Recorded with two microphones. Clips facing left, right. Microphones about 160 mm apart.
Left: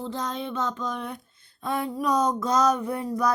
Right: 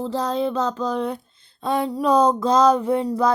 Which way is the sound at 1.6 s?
30° right (ahead or behind).